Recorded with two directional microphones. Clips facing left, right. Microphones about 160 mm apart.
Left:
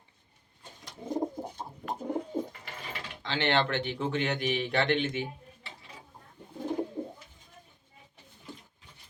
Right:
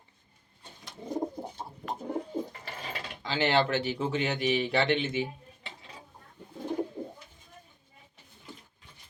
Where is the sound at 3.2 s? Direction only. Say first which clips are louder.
Right 2 dB; 5° right (ahead or behind).